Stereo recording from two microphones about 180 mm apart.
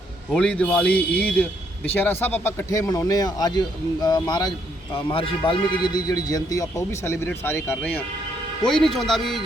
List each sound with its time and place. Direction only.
0.3 s a man's voice: 5° left (ahead or behind)